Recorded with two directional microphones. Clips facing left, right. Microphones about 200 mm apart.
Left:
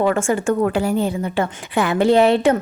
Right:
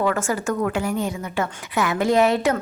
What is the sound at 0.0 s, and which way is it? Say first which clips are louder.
A woman's voice: left 4 dB; 25° left (ahead or behind).